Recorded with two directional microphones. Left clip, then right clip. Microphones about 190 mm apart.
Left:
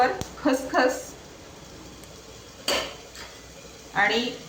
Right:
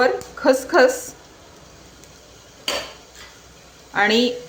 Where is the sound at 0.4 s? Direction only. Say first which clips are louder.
Right 8 dB; 60° right (ahead or behind).